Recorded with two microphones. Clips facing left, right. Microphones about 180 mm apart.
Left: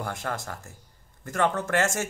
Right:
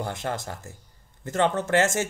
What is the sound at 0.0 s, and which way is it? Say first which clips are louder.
Speech: right 2 dB; 20° right (ahead or behind).